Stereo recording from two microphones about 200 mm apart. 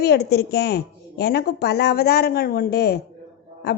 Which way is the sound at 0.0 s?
55° left (ahead or behind).